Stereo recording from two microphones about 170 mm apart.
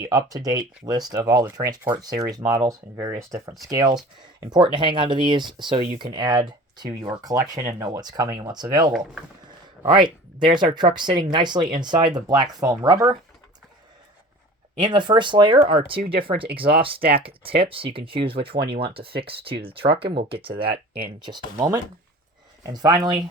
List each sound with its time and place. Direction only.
0.3 s speech: 20° right (ahead or behind)
14.8 s speech: 25° right (ahead or behind)